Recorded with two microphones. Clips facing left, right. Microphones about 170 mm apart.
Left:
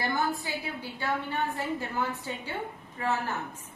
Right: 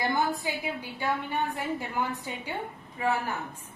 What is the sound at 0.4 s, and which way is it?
A woman's voice, 15° right (ahead or behind).